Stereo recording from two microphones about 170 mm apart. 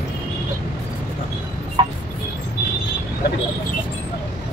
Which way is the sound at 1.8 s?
25° right (ahead or behind).